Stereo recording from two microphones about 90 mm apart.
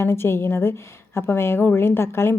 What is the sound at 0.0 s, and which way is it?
Speech, 30° left (ahead or behind).